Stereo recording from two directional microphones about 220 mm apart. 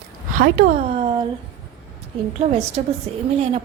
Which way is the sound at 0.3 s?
40° right (ahead or behind).